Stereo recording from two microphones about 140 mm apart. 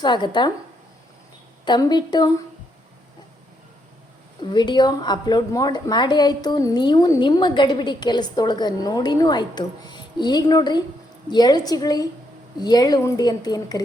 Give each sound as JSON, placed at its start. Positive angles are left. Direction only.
{"t": 0.0, "sound": "a woman's voice", "side_deg": 35}
{"t": 1.6, "sound": "a woman's voice", "side_deg": 30}
{"t": 4.4, "sound": "a woman's voice", "side_deg": 30}